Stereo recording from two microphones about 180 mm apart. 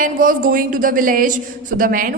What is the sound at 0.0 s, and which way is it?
A woman's voice, 50° right (ahead or behind).